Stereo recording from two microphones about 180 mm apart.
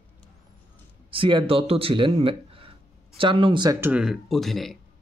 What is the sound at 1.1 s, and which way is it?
Speech, 30° right (ahead or behind).